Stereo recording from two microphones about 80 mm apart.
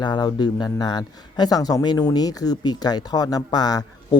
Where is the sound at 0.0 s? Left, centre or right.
Left.